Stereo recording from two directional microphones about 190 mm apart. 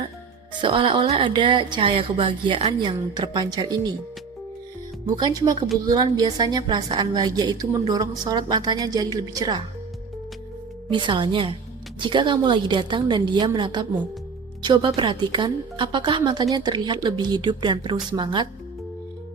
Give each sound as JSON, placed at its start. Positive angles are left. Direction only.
{"t": 0.6, "sound": "a woman's voice", "side_deg": -25}
{"t": 5.0, "sound": "a woman's voice", "side_deg": -20}
{"t": 10.8, "sound": "a woman's voice", "side_deg": -25}